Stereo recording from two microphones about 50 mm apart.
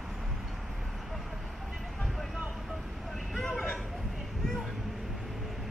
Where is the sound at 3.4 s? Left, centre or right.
Centre.